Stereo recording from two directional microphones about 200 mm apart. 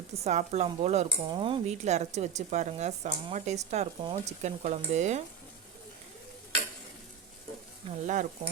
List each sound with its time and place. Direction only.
0.3 s stir: 35° right (ahead or behind)
8.0 s stir: 40° right (ahead or behind)